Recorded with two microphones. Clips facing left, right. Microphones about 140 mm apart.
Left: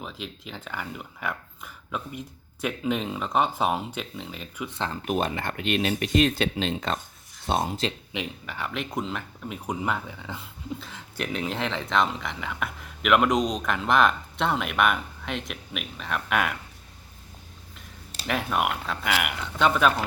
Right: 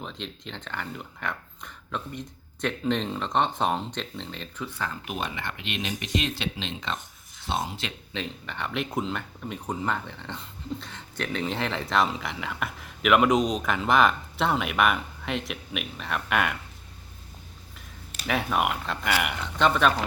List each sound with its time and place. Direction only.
0.0 s speech: 5° left (ahead or behind)
5.0 s speech: 45° left (ahead or behind)
8.1 s speech: 10° left (ahead or behind)
18.3 s speech: centre (ahead or behind)